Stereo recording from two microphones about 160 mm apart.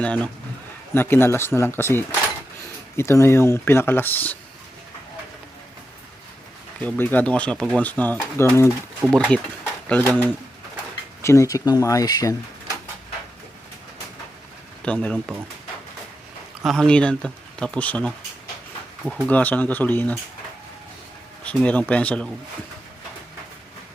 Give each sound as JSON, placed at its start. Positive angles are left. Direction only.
{"t": 0.0, "sound": "speech", "side_deg": 5}
{"t": 6.8, "sound": "speech", "side_deg": 10}
{"t": 9.0, "sound": "speech", "side_deg": 0}
{"t": 14.8, "sound": "speech", "side_deg": 5}
{"t": 16.6, "sound": "speech", "side_deg": 5}
{"t": 19.3, "sound": "speech", "side_deg": 10}
{"t": 21.4, "sound": "speech", "side_deg": 10}